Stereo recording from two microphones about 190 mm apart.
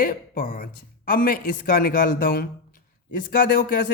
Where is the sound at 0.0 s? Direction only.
45° left (ahead or behind).